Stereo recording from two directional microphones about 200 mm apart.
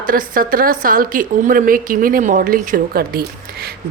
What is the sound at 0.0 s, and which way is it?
A woman's voice, 45° right (ahead or behind).